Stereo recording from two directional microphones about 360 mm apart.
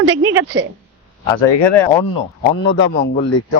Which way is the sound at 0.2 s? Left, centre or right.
Right.